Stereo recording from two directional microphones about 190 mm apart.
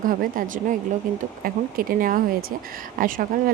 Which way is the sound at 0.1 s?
45° right (ahead or behind).